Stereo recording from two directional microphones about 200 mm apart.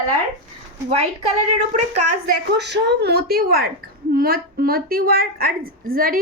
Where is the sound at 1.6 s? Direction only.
35° right (ahead or behind).